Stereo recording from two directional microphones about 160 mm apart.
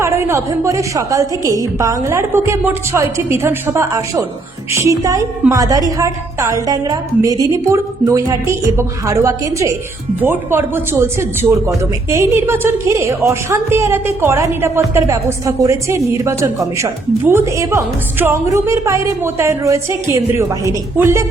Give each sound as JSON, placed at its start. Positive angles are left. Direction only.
{"t": 0.0, "sound": "a woman's voice", "side_deg": -15}